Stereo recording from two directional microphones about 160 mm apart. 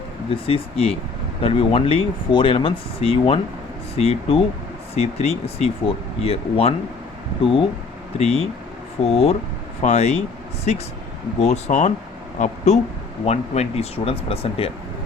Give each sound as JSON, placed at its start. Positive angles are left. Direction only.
{"t": 0.3, "sound": "speech", "side_deg": 35}
{"t": 8.2, "sound": "speech", "side_deg": 40}